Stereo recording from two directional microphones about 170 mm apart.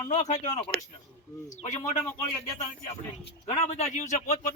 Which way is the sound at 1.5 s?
45° left (ahead or behind).